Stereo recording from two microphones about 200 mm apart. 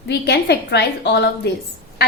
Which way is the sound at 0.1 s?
55° left (ahead or behind).